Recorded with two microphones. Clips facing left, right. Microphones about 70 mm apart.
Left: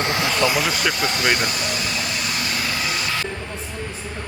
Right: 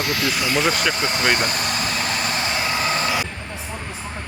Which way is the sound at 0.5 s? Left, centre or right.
Centre.